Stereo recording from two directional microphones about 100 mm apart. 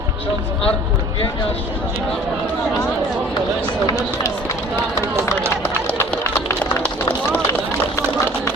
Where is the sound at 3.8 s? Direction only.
30° left (ahead or behind).